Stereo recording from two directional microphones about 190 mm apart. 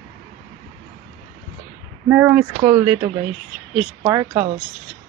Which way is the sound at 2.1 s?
10° right (ahead or behind).